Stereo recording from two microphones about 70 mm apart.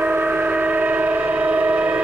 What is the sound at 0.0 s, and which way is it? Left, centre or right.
Train, right.